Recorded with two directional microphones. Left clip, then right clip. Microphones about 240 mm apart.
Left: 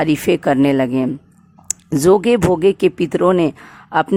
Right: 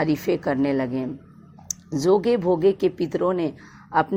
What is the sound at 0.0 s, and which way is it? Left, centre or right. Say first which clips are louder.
Speech: left 7 dB; left.